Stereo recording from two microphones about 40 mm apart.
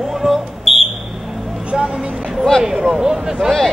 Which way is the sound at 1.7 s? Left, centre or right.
Centre.